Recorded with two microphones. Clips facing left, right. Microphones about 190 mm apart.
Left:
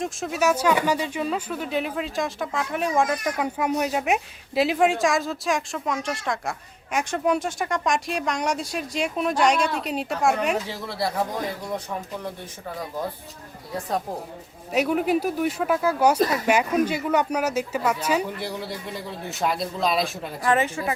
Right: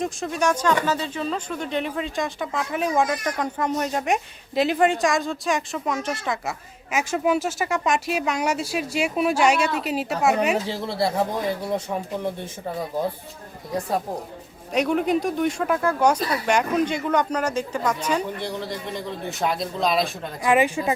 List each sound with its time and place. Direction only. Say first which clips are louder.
0.0 s speech: even; 5° left (ahead or behind)
10.7 s speech: right 4 dB; 25° right (ahead or behind)
14.7 s speech: right 1 dB; 5° left (ahead or behind)
20.4 s speech: right 3 dB; 15° right (ahead or behind)